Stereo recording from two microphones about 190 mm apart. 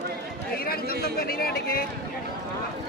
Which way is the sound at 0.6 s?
50° left (ahead or behind).